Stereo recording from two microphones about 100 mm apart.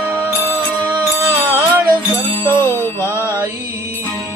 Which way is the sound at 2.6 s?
25° left (ahead or behind).